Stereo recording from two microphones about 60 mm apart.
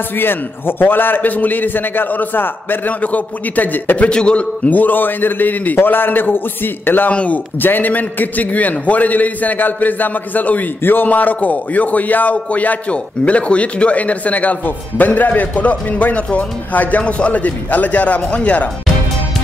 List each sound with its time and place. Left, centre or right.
0.2 s a man's voice: left
4.1 s a man's voice: centre; by 7.1 s left
7.1 s a man's voice: left